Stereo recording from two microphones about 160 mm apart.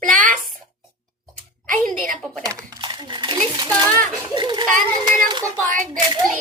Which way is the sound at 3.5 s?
25° right (ahead or behind).